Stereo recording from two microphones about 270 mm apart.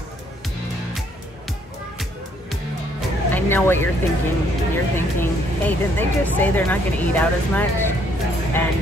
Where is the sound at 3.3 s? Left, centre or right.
Centre.